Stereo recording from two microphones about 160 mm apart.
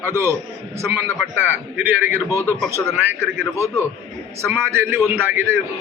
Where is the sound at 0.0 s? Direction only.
15° right (ahead or behind).